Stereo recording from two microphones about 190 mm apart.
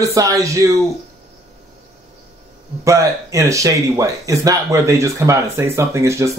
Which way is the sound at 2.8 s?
15° right (ahead or behind).